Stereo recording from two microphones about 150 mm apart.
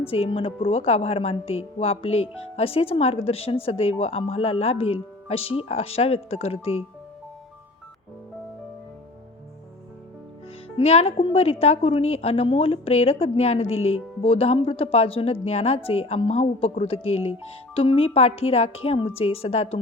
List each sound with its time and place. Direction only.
0.1 s a woman's voice: 40° left (ahead or behind)
10.8 s a woman's voice: 45° left (ahead or behind)